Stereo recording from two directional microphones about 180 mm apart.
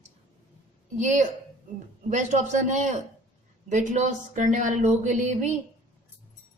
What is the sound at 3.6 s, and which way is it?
A woman's voice, 40° right (ahead or behind).